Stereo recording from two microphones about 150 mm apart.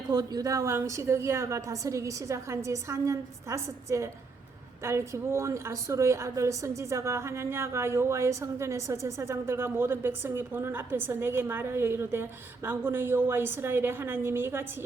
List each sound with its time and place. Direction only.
0.1 s a woman's voice: 25° right (ahead or behind)